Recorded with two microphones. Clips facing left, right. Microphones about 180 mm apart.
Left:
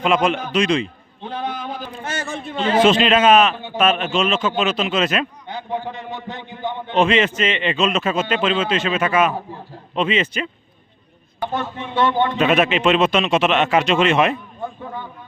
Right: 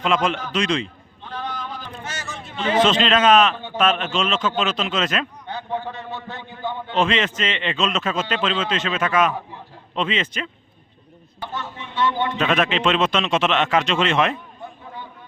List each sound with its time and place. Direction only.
0.0 s a man's voice: 10° left (ahead or behind)
1.2 s a sound: 55° left (ahead or behind)
2.7 s a man's voice: 10° left (ahead or behind)
7.0 s a man's voice: 10° left (ahead or behind)
11.5 s speech: 55° left (ahead or behind)
12.4 s a man's voice: 5° left (ahead or behind)